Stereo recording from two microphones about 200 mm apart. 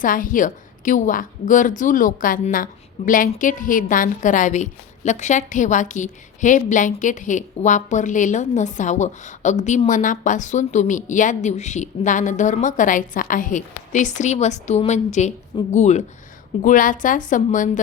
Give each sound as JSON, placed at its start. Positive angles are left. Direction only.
{"t": 0.0, "sound": "a woman's voice", "side_deg": 40}